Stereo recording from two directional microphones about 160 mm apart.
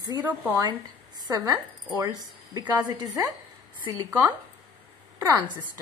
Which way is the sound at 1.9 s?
25° right (ahead or behind).